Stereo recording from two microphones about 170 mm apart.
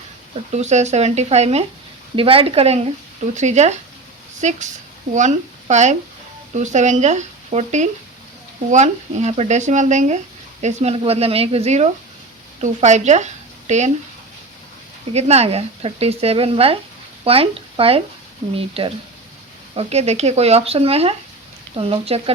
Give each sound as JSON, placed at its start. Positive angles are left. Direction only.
{"t": 0.5, "sound": "speech", "side_deg": -40}
{"t": 15.1, "sound": "speech", "side_deg": -40}